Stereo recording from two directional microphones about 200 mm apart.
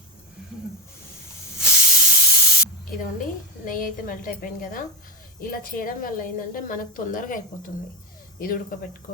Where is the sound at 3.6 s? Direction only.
45° left (ahead or behind).